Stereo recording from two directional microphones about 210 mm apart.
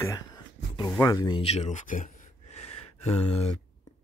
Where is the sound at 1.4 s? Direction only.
30° left (ahead or behind).